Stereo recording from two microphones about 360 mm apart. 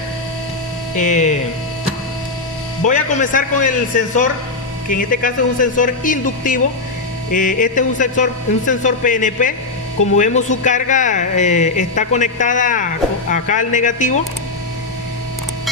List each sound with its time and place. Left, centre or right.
0.9 s speech: centre
2.9 s speech: left